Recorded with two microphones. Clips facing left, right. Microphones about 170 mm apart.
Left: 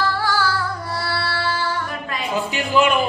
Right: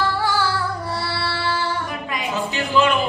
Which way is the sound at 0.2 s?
25° right (ahead or behind).